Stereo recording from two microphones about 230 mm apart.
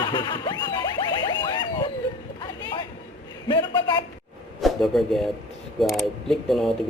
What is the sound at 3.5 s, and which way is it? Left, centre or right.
Speech, centre.